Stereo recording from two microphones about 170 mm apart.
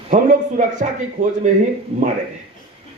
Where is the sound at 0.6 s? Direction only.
50° right (ahead or behind).